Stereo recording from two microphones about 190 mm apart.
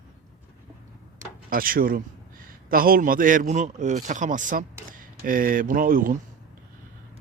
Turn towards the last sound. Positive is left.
turn(degrees=-50)  # may be behind; listen again after turning